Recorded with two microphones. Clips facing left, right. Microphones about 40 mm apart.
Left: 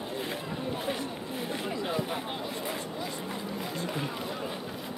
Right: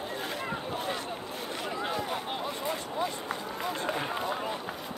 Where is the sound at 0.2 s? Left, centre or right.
Centre.